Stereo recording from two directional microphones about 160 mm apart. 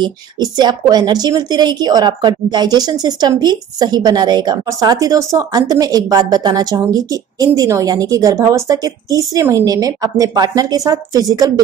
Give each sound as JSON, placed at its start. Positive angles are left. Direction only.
{"t": 0.0, "sound": "a woman's voice", "side_deg": -25}